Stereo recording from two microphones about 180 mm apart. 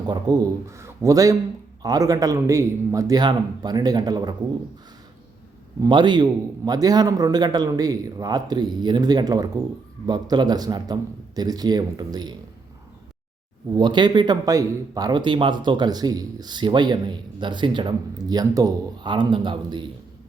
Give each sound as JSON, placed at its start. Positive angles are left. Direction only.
{"t": 0.1, "sound": "speech", "side_deg": -20}
{"t": 5.8, "sound": "speech", "side_deg": -25}
{"t": 13.7, "sound": "speech", "side_deg": -25}